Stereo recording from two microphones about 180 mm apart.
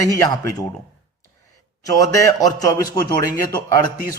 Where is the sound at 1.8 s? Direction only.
20° left (ahead or behind).